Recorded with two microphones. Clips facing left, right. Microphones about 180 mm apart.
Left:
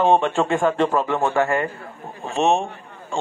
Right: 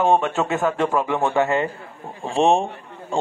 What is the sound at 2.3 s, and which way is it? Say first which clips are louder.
Speech: right 2 dB; 30° right (ahead or behind).